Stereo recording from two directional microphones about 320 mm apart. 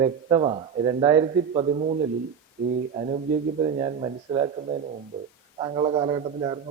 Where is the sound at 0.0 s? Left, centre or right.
Centre.